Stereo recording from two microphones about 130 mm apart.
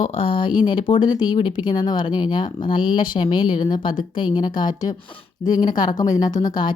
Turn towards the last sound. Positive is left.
turn(degrees=30)  # may be behind; listen again after turning